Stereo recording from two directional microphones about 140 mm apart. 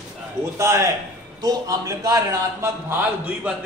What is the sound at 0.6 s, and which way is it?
A man's voice, 20° right (ahead or behind).